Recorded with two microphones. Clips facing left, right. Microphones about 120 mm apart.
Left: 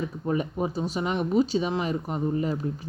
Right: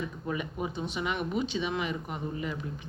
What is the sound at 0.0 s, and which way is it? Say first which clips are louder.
Speech: left 6 dB; 35° left (ahead or behind).